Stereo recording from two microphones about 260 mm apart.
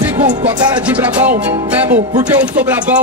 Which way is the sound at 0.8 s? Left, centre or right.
Centre.